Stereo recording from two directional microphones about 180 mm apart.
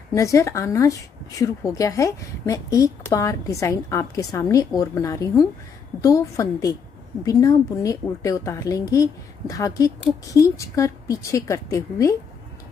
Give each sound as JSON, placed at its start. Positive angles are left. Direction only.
{"t": 0.1, "sound": "a woman's voice", "side_deg": 15}